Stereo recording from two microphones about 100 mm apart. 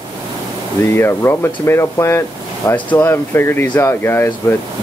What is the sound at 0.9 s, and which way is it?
Speech, 25° left (ahead or behind).